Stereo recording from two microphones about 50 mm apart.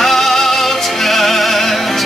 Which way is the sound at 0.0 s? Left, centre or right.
Centre.